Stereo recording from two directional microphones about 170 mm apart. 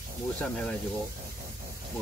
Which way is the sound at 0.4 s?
5° left (ahead or behind).